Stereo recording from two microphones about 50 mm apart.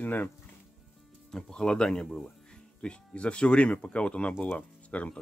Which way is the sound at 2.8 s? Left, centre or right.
Left.